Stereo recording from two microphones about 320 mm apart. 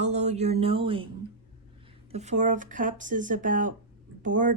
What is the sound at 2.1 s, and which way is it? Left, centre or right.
Speech, right.